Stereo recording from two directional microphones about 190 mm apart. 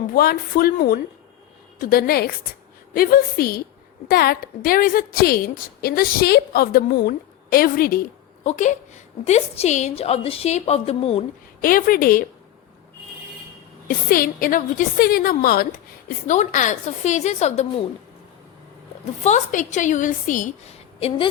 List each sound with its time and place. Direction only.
0.1 s a woman's voice: 50° left (ahead or behind); by 11.2 s 30° left (ahead or behind)
11.6 s a woman's voice: 50° left (ahead or behind)
13.8 s a woman's voice: 50° left (ahead or behind)
16.0 s a woman's voice: 40° left (ahead or behind)
19.2 s a woman's voice: 40° left (ahead or behind)